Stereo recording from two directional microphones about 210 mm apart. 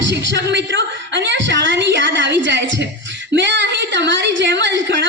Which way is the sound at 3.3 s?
60° right (ahead or behind).